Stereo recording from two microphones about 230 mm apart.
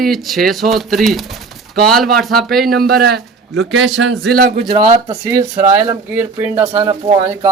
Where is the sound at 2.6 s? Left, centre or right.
Right.